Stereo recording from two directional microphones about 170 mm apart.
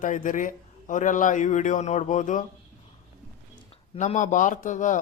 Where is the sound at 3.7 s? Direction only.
45° left (ahead or behind).